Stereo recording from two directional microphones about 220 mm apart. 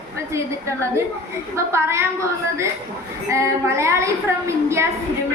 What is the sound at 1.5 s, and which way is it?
Speech, 10° right (ahead or behind).